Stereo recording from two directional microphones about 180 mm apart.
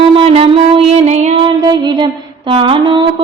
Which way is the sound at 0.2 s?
35° right (ahead or behind).